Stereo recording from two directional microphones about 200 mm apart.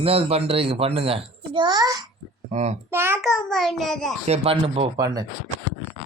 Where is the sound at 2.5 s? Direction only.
35° right (ahead or behind).